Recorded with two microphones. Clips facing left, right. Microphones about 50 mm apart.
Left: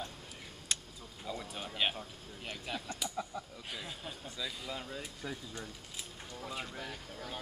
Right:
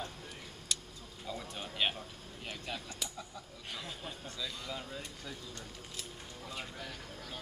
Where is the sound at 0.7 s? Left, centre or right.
Left.